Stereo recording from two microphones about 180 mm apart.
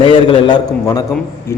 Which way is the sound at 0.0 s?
25° left (ahead or behind).